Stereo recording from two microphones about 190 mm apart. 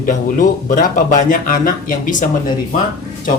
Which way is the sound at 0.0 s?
45° left (ahead or behind).